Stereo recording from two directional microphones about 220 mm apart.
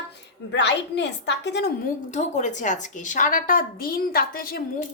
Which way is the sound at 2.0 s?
35° left (ahead or behind).